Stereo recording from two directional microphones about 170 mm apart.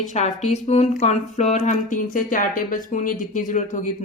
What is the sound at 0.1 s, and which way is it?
Speech, 45° left (ahead or behind).